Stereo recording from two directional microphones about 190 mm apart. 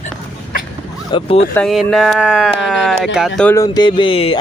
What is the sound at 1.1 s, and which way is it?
Speech, 30° left (ahead or behind).